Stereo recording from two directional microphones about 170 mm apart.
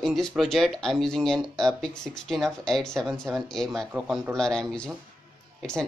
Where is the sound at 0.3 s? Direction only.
Centre (ahead or behind).